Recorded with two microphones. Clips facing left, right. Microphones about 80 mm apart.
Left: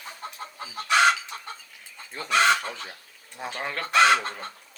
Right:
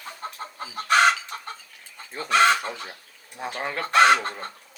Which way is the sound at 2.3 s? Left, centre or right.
Right.